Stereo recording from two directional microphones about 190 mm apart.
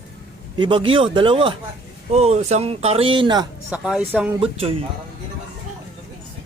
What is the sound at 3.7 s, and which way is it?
Speech, 5° right (ahead or behind).